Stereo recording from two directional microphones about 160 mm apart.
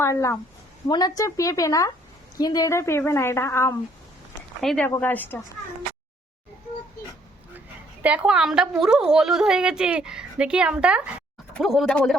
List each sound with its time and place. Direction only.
0.0 s a woman's voice: 20° left (ahead or behind)
4.6 s a woman's voice: 5° left (ahead or behind)
8.0 s a woman's voice: 10° right (ahead or behind)